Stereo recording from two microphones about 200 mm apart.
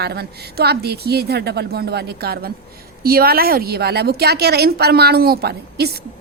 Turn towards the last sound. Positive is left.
turn(degrees=-50)  # may be behind; listen again after turning